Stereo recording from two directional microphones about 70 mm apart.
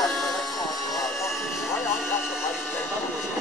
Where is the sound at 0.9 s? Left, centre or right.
Left.